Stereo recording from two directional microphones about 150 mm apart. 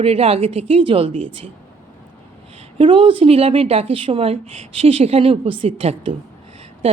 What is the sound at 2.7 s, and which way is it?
Speech, 35° right (ahead or behind).